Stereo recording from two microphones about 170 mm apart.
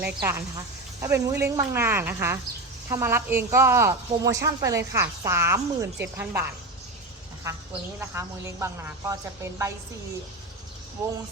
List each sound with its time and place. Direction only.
0.0 s a woman's voice: 10° right (ahead or behind)
7.5 s a woman's voice: 20° right (ahead or behind)